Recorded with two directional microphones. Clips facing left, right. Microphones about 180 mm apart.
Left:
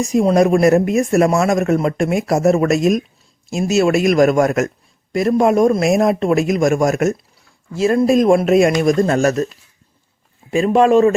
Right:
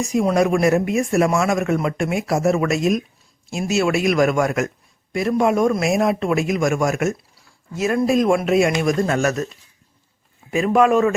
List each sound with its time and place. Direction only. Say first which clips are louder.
0.0 s speech: left 4 dB; 35° left (ahead or behind)
10.5 s speech: left 4 dB; 30° left (ahead or behind)